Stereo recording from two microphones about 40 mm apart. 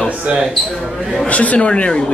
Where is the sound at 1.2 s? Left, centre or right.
Left.